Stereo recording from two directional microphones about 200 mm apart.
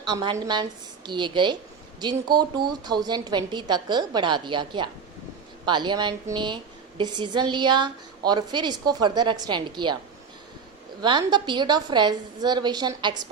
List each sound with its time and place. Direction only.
0.1 s a woman's voice: 20° right (ahead or behind)
11.0 s a woman's voice: 20° right (ahead or behind)